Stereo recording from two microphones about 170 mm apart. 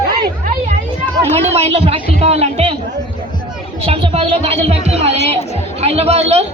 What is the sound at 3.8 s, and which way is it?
Speech, 35° right (ahead or behind).